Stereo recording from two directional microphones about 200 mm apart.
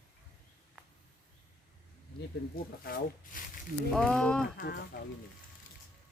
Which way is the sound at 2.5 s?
45° left (ahead or behind).